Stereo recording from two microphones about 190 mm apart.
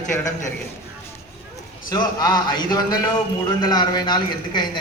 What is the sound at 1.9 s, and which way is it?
A man's voice, 20° left (ahead or behind).